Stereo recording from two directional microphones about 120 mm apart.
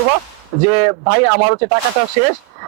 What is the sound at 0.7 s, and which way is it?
A man's voice, 20° right (ahead or behind).